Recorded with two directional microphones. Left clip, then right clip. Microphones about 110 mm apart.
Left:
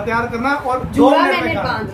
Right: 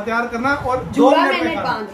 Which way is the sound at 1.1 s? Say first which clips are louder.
Left 1 dB; 20° left (ahead or behind).